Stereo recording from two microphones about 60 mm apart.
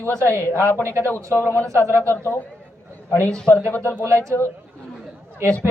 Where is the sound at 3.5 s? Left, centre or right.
Left.